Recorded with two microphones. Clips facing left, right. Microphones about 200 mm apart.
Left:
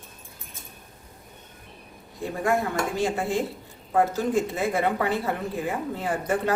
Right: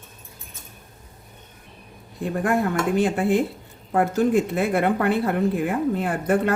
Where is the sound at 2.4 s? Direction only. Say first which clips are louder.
Right 3 dB; 60° right (ahead or behind).